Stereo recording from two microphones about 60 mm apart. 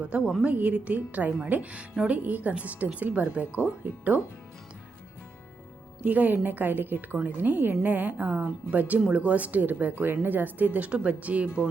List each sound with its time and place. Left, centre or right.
0.0 s a woman's voice: centre
6.1 s a woman's voice: right